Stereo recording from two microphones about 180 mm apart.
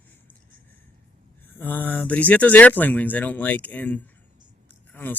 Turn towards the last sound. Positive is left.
turn(degrees=10)  # may be behind; listen again after turning